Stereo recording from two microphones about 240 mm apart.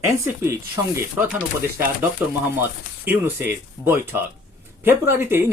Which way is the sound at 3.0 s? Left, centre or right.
Centre.